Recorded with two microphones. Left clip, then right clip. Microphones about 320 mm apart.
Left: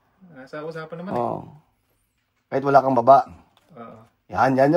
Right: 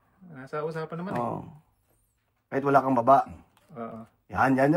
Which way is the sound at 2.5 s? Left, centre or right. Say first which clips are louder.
Left 6 dB; left.